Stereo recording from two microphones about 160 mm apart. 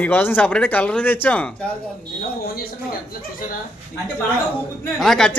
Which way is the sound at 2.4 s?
70° left (ahead or behind).